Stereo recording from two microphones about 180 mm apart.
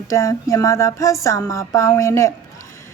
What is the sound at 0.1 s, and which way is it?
A woman's voice, 20° left (ahead or behind).